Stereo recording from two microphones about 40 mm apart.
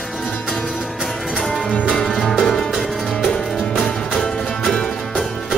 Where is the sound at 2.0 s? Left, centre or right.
Centre.